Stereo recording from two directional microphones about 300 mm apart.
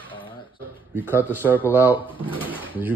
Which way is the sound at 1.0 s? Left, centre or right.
Centre.